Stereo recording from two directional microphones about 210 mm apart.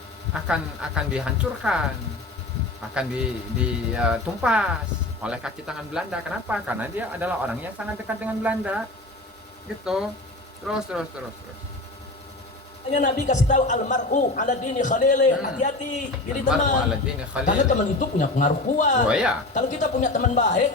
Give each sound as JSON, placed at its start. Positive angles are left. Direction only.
{"t": 0.4, "sound": "speech", "side_deg": -5}
{"t": 2.9, "sound": "speech", "side_deg": -5}
{"t": 9.8, "sound": "speech", "side_deg": -5}
{"t": 12.9, "sound": "a man's voice", "side_deg": 35}
{"t": 19.0, "sound": "speech", "side_deg": -5}
{"t": 19.5, "sound": "a man's voice", "side_deg": 35}